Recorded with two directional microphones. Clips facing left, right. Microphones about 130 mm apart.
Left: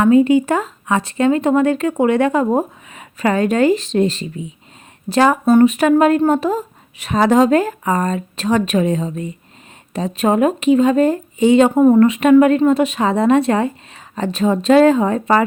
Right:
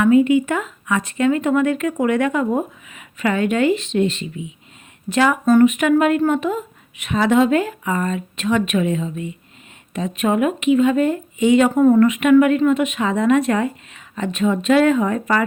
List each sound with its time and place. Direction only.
0.0 s speech: 30° left (ahead or behind)
11.9 s speech: 35° left (ahead or behind)